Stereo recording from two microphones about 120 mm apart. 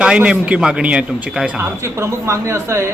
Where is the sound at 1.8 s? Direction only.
25° right (ahead or behind).